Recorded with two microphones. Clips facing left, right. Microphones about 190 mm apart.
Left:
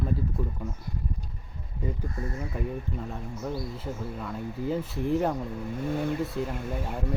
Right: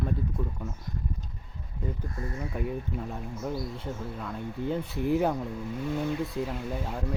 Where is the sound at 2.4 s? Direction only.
Centre (ahead or behind).